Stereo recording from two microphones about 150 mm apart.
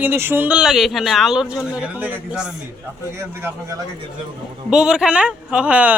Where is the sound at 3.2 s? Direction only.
15° right (ahead or behind).